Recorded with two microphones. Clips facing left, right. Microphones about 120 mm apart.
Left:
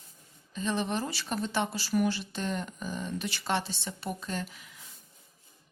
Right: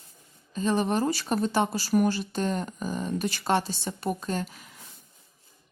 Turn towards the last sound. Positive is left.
turn(degrees=-45)  # may be behind; listen again after turning